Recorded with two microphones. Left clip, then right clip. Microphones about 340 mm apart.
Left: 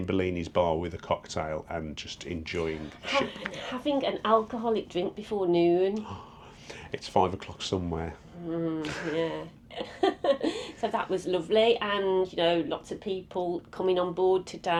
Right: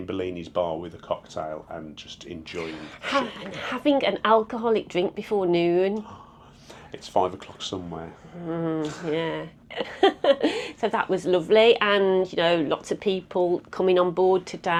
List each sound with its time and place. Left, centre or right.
0.0 s speech: centre
2.2 s speech: centre
3.2 s speech: right
6.9 s speech: centre
8.4 s speech: right
9.7 s a woman's voice: right
13.3 s speech: right